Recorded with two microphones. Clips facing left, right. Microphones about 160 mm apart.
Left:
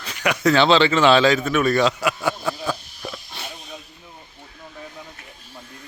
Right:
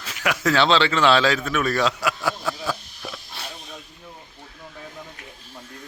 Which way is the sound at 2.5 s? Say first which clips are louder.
Left 2 dB; 15° left (ahead or behind).